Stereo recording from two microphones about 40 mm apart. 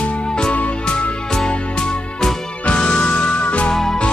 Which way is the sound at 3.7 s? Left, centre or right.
Centre.